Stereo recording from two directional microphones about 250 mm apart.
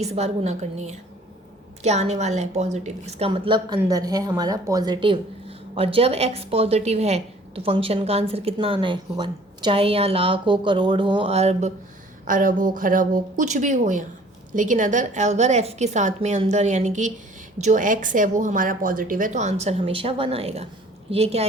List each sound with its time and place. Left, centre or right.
0.0 s a woman's voice: right